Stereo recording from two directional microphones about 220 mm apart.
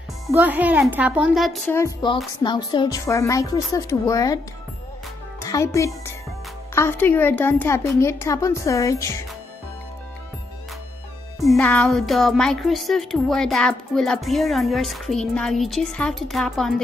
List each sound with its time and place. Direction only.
0.3 s a child's voice: 10° right (ahead or behind)
1.7 s a woman's voice: 15° left (ahead or behind)
5.4 s a woman's voice: 15° left (ahead or behind)
11.3 s speech: centre (ahead or behind)